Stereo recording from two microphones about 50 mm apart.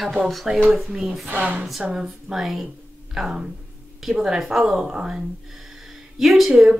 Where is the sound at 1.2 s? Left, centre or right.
Right.